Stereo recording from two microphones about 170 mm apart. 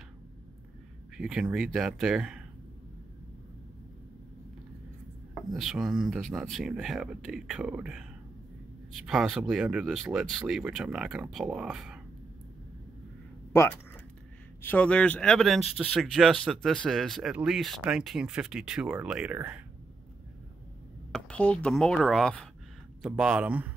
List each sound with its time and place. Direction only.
1.1 s speech: 5° right (ahead or behind)
5.3 s speech: centre (ahead or behind)
13.5 s speech: 15° left (ahead or behind); by 19.6 s 10° right (ahead or behind)
21.1 s speech: 10° left (ahead or behind); by 23.7 s 10° right (ahead or behind)